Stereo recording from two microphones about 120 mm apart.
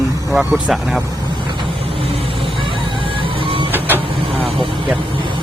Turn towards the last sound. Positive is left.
turn(degrees=-50)  # may be behind; listen again after turning